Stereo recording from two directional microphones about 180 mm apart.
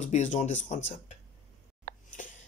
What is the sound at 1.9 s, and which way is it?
Sneeze, 55° right (ahead or behind).